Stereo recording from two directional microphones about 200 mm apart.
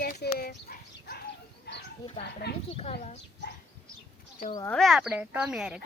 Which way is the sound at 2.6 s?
30° left (ahead or behind).